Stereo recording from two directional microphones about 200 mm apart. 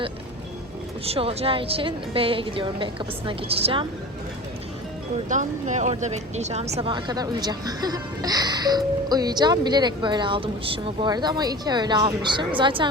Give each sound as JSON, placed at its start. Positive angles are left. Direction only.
{"t": 1.0, "sound": "a woman's voice", "side_deg": -30}
{"t": 5.3, "sound": "a woman's voice", "side_deg": -40}